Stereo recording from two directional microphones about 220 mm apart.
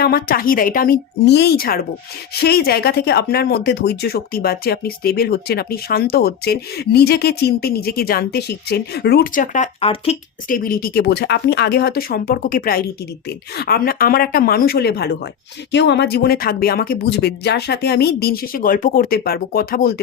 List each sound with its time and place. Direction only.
0.0 s speech: 45° left (ahead or behind)
10.5 s speech: 40° left (ahead or behind)